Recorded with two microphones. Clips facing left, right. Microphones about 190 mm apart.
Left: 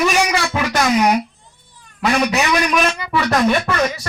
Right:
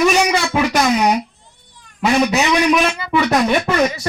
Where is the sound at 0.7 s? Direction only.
15° right (ahead or behind).